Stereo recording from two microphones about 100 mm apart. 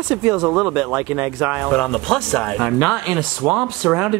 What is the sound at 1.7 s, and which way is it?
Speech, 10° left (ahead or behind).